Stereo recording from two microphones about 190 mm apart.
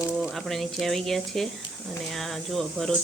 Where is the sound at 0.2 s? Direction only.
Centre (ahead or behind).